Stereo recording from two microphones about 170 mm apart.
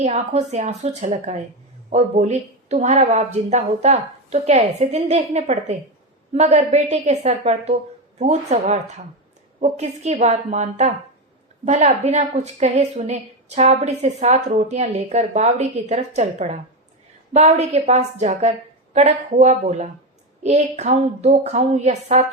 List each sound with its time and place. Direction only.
0.0 s a woman's voice: 40° right (ahead or behind)